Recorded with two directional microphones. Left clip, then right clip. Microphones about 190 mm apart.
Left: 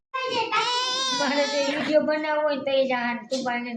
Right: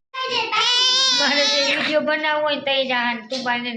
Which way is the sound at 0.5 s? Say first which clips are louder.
Right 10 dB; 35° left (ahead or behind).